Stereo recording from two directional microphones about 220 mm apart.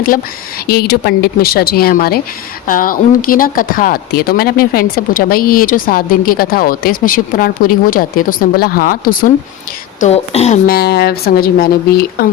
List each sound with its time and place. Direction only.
0.7 s speech: 45° left (ahead or behind)
10.0 s speech: 30° left (ahead or behind)
10.7 s speech: 45° left (ahead or behind)